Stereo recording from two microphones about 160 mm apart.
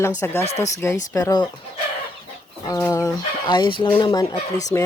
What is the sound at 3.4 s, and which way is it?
Speech, 30° left (ahead or behind).